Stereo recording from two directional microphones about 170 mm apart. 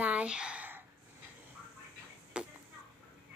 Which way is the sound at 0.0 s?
5° right (ahead or behind).